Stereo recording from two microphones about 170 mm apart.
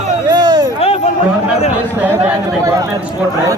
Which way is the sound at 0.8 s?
35° left (ahead or behind).